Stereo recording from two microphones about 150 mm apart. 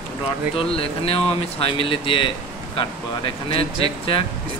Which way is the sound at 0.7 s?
40° left (ahead or behind).